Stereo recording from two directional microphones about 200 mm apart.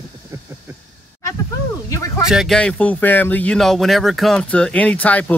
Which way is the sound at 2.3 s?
Centre (ahead or behind).